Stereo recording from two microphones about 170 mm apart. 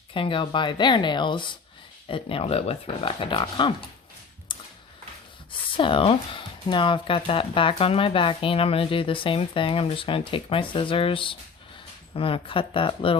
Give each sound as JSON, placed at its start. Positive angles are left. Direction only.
{"t": 0.1, "sound": "speech", "side_deg": 30}
{"t": 4.5, "sound": "a sound", "side_deg": 30}
{"t": 5.5, "sound": "speech", "side_deg": 30}